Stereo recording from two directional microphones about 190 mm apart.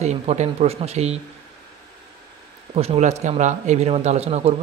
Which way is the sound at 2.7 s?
35° right (ahead or behind).